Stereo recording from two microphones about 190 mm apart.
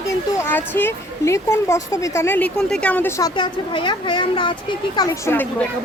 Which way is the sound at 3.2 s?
25° left (ahead or behind).